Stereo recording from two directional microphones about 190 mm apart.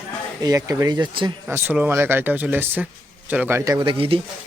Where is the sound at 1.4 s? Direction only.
10° right (ahead or behind).